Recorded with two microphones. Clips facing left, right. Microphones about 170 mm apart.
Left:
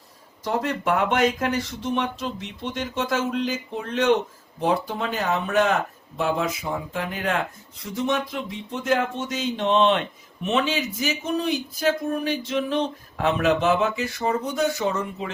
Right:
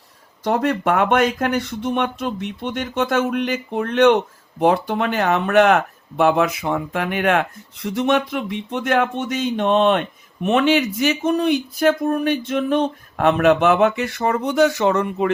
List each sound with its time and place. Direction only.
0.4 s speech: 65° right (ahead or behind)